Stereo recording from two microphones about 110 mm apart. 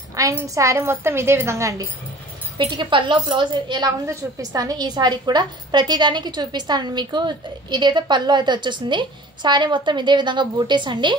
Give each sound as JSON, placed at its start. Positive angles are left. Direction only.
{"t": 0.1, "sound": "a sound", "side_deg": -30}
{"t": 0.6, "sound": "a woman's voice", "side_deg": -30}
{"t": 2.5, "sound": "a woman's voice", "side_deg": -45}
{"t": 4.0, "sound": "a woman's voice", "side_deg": -30}